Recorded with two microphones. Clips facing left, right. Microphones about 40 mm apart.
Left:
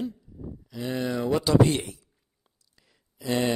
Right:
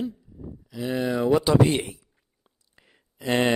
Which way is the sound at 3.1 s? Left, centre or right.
Right.